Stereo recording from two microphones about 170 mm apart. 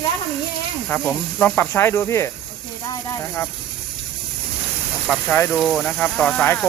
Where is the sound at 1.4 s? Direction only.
15° left (ahead or behind).